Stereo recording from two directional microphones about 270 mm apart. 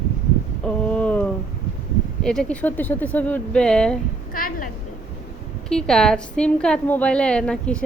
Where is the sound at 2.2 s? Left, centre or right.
Centre.